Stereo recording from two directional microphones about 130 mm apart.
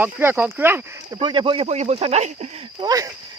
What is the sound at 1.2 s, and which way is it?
Speech, 40° right (ahead or behind).